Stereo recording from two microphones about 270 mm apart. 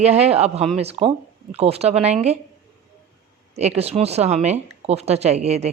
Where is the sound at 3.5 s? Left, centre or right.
Right.